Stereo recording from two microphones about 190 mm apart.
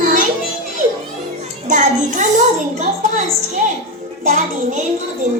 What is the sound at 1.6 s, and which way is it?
Music, 40° right (ahead or behind).